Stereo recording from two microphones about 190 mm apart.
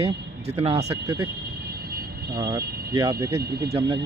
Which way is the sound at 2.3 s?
20° right (ahead or behind).